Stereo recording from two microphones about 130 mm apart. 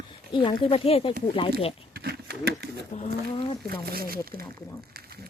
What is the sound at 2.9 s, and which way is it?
Speech, 75° left (ahead or behind).